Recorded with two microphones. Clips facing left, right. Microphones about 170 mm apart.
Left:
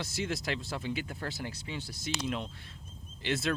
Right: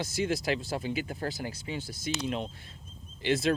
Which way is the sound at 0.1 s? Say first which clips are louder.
Right 6 dB; centre (ahead or behind).